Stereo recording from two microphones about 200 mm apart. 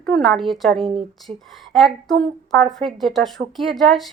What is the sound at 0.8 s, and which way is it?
Speech, 25° right (ahead or behind).